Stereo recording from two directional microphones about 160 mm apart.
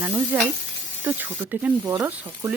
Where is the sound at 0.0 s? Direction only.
10° right (ahead or behind).